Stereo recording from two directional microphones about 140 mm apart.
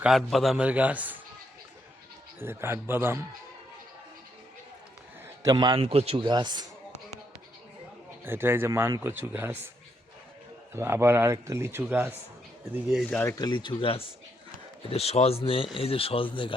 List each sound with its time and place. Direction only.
0.0 s speech: centre (ahead or behind)
2.4 s speech: 15° right (ahead or behind)
5.4 s a man's voice: 30° right (ahead or behind)
5.8 s speech: 45° right (ahead or behind)
6.2 s speech: 30° right (ahead or behind)
8.2 s speech: 15° right (ahead or behind)
10.8 s speech: 20° right (ahead or behind)
12.7 s speech: 5° right (ahead or behind)
13.1 s speech: 10° left (ahead or behind)
13.3 s speech: 30° left (ahead or behind)